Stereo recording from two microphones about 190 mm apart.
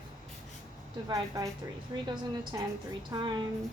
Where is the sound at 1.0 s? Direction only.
20° right (ahead or behind).